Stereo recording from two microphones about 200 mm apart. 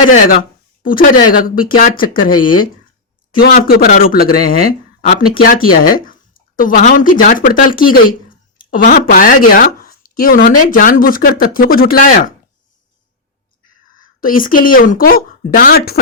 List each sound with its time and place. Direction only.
0.9 s speech: 45° left (ahead or behind)
14.0 s speech: 45° left (ahead or behind)